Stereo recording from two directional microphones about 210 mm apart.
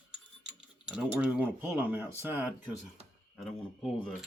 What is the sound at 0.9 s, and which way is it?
Mechanisms, 5° right (ahead or behind).